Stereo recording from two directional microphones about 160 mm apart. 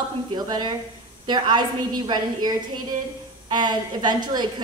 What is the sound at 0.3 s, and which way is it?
A woman's voice, 30° right (ahead or behind).